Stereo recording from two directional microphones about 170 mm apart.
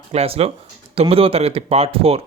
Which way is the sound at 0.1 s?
35° right (ahead or behind).